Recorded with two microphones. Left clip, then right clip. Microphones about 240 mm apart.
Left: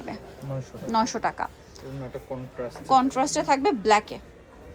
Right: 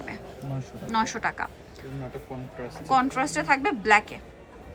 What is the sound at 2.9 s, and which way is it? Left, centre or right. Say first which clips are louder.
A woman's voice: left 2 dB; centre.